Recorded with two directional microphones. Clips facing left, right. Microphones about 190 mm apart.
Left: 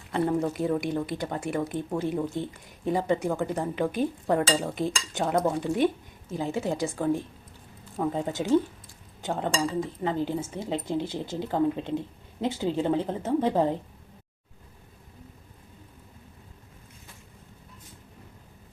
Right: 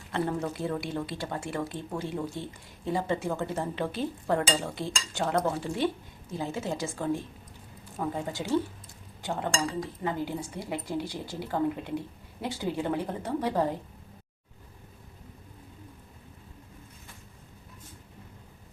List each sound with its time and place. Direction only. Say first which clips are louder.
0.1 s a woman's voice: left 4 dB; 15° left (ahead or behind)